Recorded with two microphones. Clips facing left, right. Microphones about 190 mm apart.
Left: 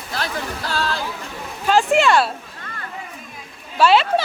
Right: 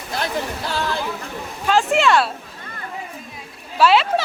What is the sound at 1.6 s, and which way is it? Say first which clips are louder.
Speech: left 1 dB; centre (ahead or behind).